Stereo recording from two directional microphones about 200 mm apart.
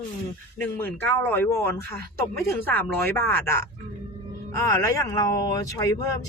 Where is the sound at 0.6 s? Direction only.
10° left (ahead or behind).